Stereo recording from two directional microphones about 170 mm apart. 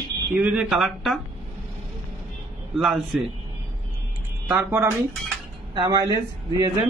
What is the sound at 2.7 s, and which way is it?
Speech, 5° right (ahead or behind).